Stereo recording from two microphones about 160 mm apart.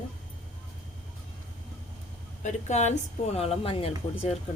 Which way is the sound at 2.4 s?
45° left (ahead or behind).